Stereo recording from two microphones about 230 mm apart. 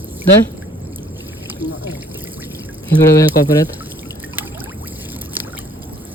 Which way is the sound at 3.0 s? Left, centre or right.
Centre.